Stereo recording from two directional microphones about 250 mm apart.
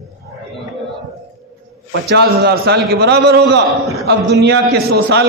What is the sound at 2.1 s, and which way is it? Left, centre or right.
A man's voice, right.